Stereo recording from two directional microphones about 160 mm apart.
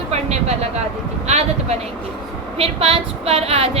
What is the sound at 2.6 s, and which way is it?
A woman's voice, 35° right (ahead or behind).